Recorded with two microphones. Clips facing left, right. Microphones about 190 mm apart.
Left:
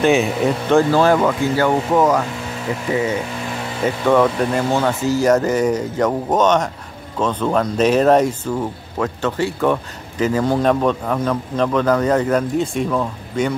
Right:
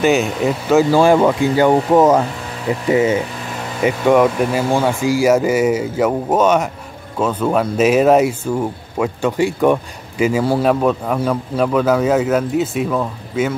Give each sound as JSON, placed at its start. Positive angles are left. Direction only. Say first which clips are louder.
{"t": 0.0, "sound": "speech", "louder": "even", "side_deg": 0}